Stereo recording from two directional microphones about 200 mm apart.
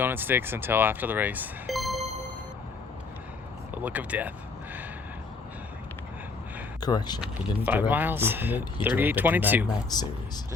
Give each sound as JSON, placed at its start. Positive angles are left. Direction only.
{"t": 0.0, "sound": "speech", "side_deg": -10}
{"t": 3.8, "sound": "speech", "side_deg": -5}
{"t": 6.7, "sound": "speech", "side_deg": 20}
{"t": 7.2, "sound": "speech", "side_deg": -10}
{"t": 9.9, "sound": "speech", "side_deg": 20}